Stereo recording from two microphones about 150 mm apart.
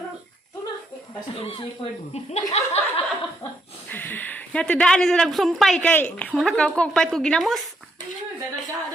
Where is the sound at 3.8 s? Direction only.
10° left (ahead or behind).